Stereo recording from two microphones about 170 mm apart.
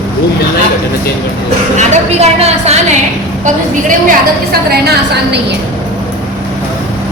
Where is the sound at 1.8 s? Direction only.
40° right (ahead or behind).